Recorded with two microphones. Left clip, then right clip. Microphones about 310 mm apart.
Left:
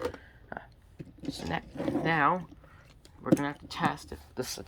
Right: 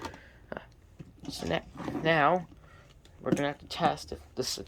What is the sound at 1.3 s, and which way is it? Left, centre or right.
A woman's voice, centre.